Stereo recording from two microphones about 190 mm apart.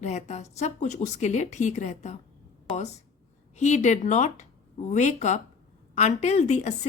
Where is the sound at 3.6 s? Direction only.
35° left (ahead or behind).